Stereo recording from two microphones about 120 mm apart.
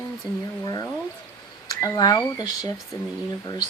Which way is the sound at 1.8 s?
30° left (ahead or behind).